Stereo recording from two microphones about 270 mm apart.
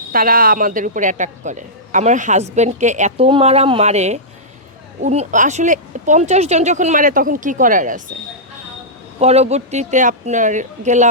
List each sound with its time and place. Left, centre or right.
0.1 s a woman's voice: right
9.2 s a woman's voice: right